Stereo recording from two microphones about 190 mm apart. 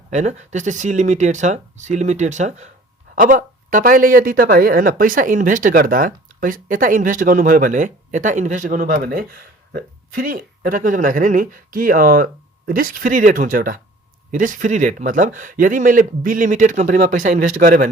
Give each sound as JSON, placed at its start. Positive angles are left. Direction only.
{"t": 0.1, "sound": "speech", "side_deg": -40}